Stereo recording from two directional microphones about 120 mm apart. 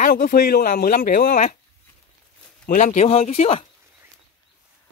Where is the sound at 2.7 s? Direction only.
80° left; by 3.6 s 55° left (ahead or behind).